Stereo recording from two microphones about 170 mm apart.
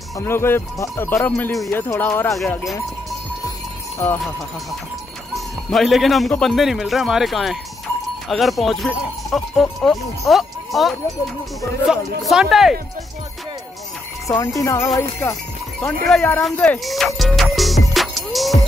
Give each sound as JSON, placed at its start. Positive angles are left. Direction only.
{"t": 0.2, "sound": "speech", "side_deg": 15}
{"t": 5.3, "sound": "speech", "side_deg": 0}
{"t": 14.2, "sound": "speech", "side_deg": 20}